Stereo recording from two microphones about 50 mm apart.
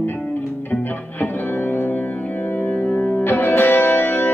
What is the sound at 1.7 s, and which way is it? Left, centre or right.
Music, left.